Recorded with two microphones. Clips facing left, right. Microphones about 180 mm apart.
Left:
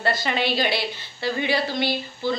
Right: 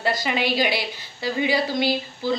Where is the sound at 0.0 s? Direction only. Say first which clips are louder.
Even; 10° right (ahead or behind).